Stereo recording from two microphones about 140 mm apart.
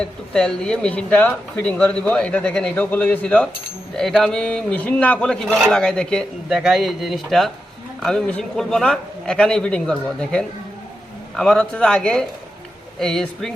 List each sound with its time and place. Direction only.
0.0 s a man's voice: 5° left (ahead or behind)